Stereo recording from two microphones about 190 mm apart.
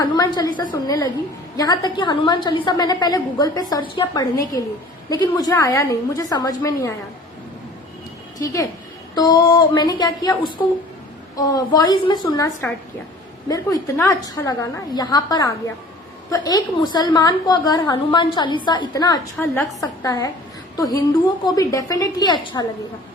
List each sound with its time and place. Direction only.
0.0 s a woman's voice: 20° left (ahead or behind)
9.1 s a woman's voice: 20° left (ahead or behind)
13.5 s a woman's voice: 15° left (ahead or behind)